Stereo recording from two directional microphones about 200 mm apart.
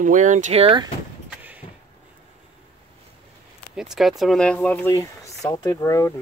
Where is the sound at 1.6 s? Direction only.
35° left (ahead or behind).